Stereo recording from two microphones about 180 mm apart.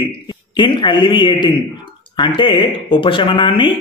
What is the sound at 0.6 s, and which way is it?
A man's voice, 25° left (ahead or behind).